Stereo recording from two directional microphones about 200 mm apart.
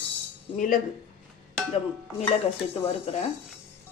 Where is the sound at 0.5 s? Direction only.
40° left (ahead or behind).